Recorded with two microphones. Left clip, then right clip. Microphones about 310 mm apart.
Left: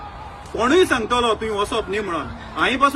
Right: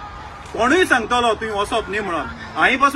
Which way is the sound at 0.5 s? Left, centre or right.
Centre.